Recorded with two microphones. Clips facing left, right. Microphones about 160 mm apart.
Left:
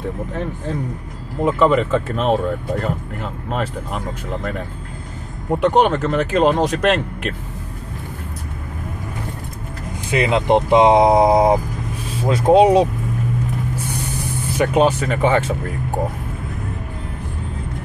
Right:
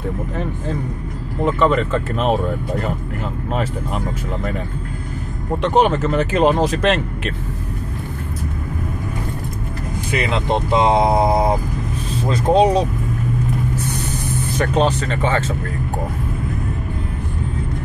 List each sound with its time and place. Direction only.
1.4 s speech: 5° left (ahead or behind)
5.7 s speech: centre (ahead or behind)
10.1 s speech: 20° left (ahead or behind)
14.6 s speech: 10° left (ahead or behind)